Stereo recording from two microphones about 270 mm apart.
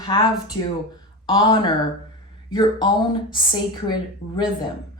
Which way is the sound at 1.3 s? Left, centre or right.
Centre.